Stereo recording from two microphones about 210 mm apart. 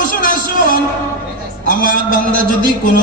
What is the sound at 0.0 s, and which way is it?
Music, 40° left (ahead or behind).